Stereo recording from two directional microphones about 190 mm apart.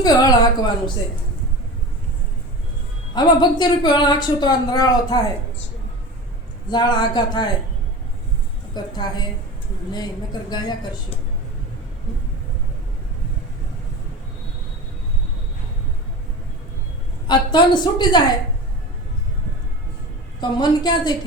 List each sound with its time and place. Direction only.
0.0 s a sound: 20° left (ahead or behind)
3.2 s speech: 25° left (ahead or behind)
6.7 s speech: 20° left (ahead or behind)
8.7 s speech: 20° left (ahead or behind)
10.5 s speech: 20° left (ahead or behind)
17.2 s speech: 25° left (ahead or behind)
20.4 s speech: 20° left (ahead or behind)